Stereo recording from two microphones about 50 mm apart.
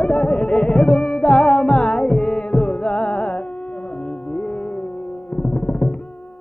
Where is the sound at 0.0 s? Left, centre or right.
Centre.